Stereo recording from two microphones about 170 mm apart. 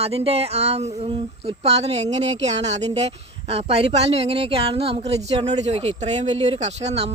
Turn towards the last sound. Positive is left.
turn(degrees=-40)  # may be behind; listen again after turning